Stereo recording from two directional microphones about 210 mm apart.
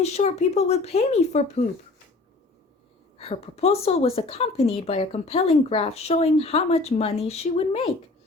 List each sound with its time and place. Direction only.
0.0 s speech: 30° left (ahead or behind)
3.2 s a woman's voice: 30° left (ahead or behind)